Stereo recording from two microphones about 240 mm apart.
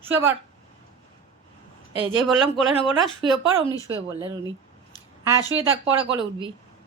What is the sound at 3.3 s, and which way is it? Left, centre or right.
Speech, centre.